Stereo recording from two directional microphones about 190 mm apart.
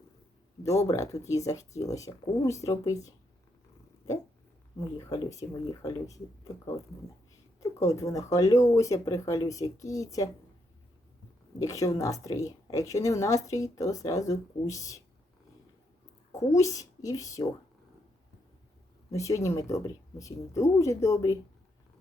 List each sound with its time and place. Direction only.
0.6 s speech: 15° left (ahead or behind)
4.9 s speech: 15° left (ahead or behind)
7.6 s speech: 15° left (ahead or behind)
11.6 s speech: 15° left (ahead or behind)
16.3 s speech: 15° left (ahead or behind)
19.1 s speech: 15° left (ahead or behind)